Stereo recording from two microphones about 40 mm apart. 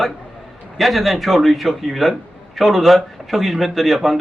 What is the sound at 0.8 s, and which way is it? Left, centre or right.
A man's voice, centre.